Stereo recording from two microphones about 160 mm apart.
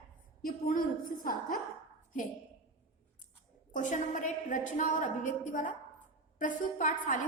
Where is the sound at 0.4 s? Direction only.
60° left (ahead or behind).